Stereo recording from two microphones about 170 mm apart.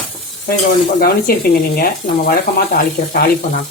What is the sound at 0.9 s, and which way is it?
Speech, 60° left (ahead or behind).